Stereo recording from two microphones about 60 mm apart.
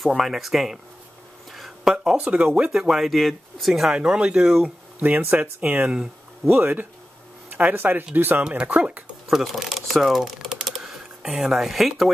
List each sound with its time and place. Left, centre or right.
0.0 s speech: centre
1.5 s a sound: centre
2.2 s speech: centre
2.7 s speech: centre
3.9 s speech: centre
5.0 s speech: right
8.5 s speech: right
9.3 s speech: centre